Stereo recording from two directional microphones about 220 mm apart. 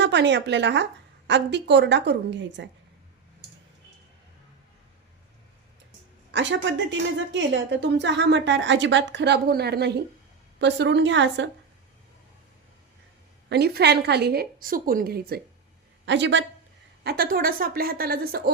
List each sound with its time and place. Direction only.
0.0 s a woman's voice: 50° right (ahead or behind)
6.3 s a woman's voice: 55° right (ahead or behind)
13.5 s a woman's voice: 45° right (ahead or behind)
16.0 s speech: 55° right (ahead or behind)
17.0 s a woman's voice: 45° right (ahead or behind)